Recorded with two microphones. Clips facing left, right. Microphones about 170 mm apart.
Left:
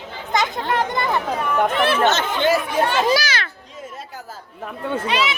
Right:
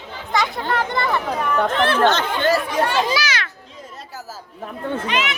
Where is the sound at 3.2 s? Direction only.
30° left (ahead or behind).